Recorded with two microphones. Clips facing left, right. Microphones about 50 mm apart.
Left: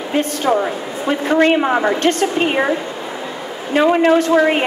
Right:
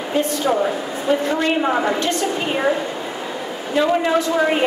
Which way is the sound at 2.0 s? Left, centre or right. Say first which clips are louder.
Left 5 dB; left.